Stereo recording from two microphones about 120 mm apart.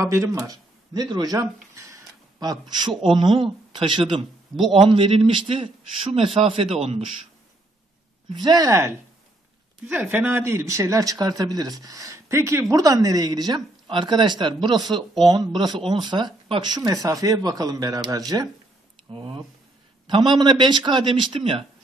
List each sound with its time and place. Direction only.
0.0 s speech: 25° right (ahead or behind); by 7.2 s 55° right (ahead or behind)
8.3 s speech: 35° right (ahead or behind)
20.1 s speech: 40° right (ahead or behind)